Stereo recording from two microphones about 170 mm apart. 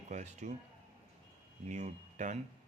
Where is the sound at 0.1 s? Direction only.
45° right (ahead or behind).